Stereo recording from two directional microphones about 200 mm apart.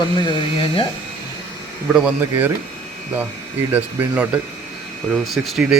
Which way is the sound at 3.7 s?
5° right (ahead or behind).